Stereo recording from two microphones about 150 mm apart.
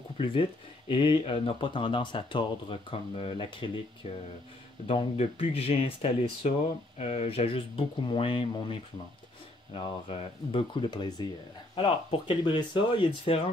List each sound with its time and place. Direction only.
0.2 s speech: 35° left (ahead or behind)
9.8 s speech: 35° left (ahead or behind)